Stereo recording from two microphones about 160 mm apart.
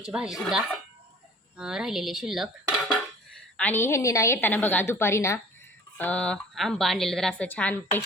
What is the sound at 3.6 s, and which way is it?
A woman's voice, 10° left (ahead or behind).